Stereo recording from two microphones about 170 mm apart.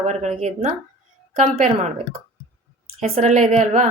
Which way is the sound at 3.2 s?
45° right (ahead or behind).